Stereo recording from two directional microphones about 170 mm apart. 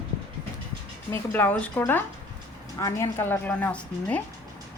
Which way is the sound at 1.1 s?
10° left (ahead or behind).